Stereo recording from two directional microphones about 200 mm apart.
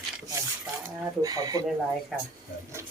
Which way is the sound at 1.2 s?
20° right (ahead or behind).